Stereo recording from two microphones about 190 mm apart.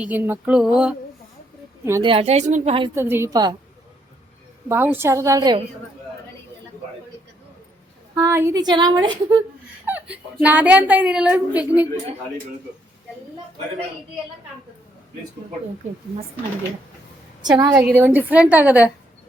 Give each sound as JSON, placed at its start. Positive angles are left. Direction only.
{"t": 0.0, "sound": "a sound", "side_deg": -10}
{"t": 1.8, "sound": "a woman's voice", "side_deg": -15}
{"t": 2.0, "sound": "a woman's voice", "side_deg": -30}
{"t": 2.9, "sound": "a woman's voice", "side_deg": -15}
{"t": 4.7, "sound": "a woman's voice", "side_deg": -10}
{"t": 8.1, "sound": "a woman's voice", "side_deg": -15}
{"t": 9.8, "sound": "a woman's voice", "side_deg": -10}
{"t": 17.4, "sound": "a woman's voice", "side_deg": -20}
{"t": 17.7, "sound": "a woman's voice", "side_deg": -5}